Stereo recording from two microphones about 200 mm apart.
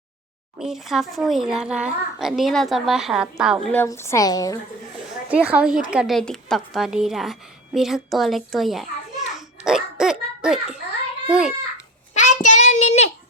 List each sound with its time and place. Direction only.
0.6 s a child's voice: centre (ahead or behind)
3.7 s a woman's voice: 10° left (ahead or behind)
5.3 s a woman's voice: 5° right (ahead or behind)
12.1 s child singing: 35° left (ahead or behind)